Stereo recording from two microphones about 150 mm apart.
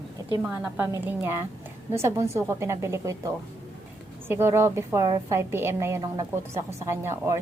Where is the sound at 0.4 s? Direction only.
10° right (ahead or behind).